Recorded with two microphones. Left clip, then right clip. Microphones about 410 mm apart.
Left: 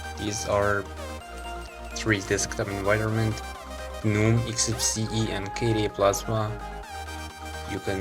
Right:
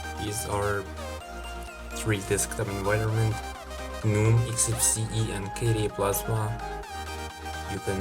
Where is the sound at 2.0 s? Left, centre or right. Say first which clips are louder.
Left 3 dB; right.